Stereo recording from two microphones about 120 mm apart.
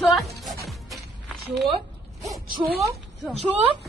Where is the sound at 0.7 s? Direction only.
Centre (ahead or behind).